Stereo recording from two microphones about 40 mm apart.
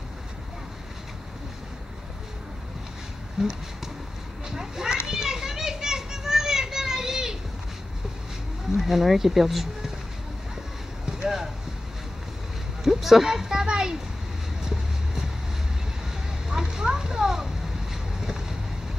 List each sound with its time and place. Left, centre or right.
3.4 s speech: centre
4.5 s children playing: centre
8.7 s speech: centre
11.1 s a sound: centre
12.8 s speech: centre
14.6 s vehicle: centre
16.4 s a sound: centre
18.2 s boat: centre